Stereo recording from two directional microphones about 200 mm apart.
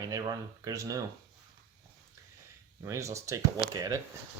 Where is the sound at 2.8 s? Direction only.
15° right (ahead or behind).